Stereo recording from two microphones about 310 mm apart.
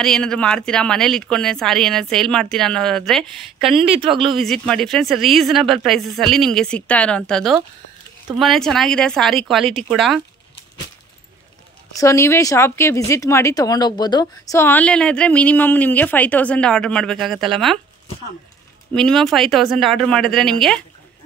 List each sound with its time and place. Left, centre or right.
0.0 s speech: centre
3.8 s a woman's voice: centre
4.2 s speech: centre
12.0 s speech: centre
18.9 s speech: centre